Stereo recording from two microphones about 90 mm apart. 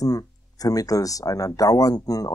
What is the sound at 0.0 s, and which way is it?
Speech, 45° left (ahead or behind).